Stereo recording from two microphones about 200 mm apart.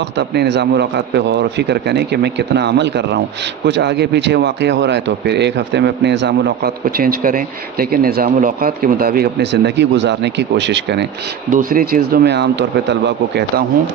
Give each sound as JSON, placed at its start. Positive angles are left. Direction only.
{"t": 0.2, "sound": "speech", "side_deg": -60}
{"t": 11.5, "sound": "speech", "side_deg": -45}